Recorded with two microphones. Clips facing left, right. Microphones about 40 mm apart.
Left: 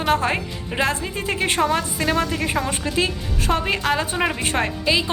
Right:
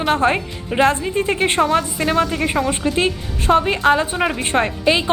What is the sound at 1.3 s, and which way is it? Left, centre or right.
Speech, right.